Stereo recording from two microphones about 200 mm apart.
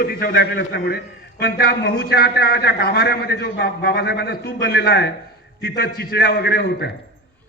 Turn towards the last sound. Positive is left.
turn(degrees=55)  # may be behind; listen again after turning